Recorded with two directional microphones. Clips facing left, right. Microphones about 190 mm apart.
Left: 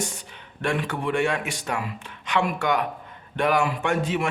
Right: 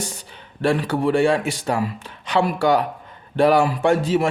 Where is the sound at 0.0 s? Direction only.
35° right (ahead or behind).